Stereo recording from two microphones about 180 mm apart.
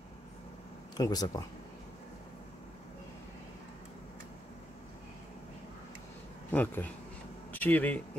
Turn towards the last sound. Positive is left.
turn(degrees=10)  # may be behind; listen again after turning